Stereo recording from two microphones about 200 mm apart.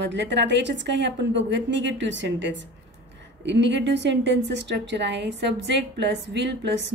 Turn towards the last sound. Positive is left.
turn(degrees=-60)  # may be behind; listen again after turning